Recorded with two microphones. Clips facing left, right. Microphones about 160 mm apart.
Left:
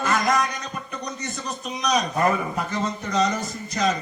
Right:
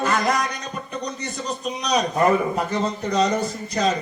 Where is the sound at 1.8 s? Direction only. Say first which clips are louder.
Even; 30° right (ahead or behind).